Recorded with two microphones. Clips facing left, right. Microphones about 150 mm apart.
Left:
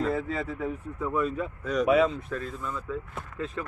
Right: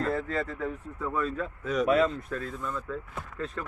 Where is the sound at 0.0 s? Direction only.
5° left (ahead or behind).